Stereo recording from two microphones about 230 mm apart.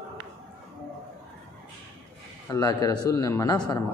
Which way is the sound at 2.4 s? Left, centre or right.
Centre.